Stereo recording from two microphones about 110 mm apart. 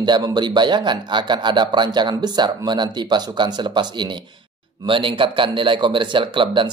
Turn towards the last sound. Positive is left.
turn(degrees=-50)  # may be behind; listen again after turning